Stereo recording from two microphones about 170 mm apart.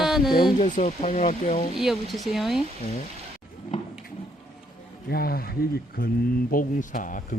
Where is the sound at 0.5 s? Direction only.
45° left (ahead or behind).